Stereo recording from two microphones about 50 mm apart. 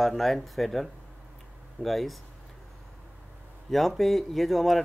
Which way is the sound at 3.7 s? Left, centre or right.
Centre.